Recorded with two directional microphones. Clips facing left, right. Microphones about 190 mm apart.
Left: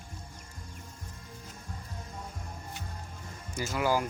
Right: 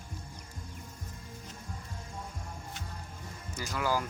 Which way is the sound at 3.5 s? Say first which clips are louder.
Left 3 dB; 15° left (ahead or behind).